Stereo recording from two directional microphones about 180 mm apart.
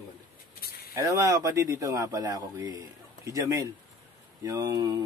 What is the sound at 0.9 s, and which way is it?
Speech, 20° right (ahead or behind).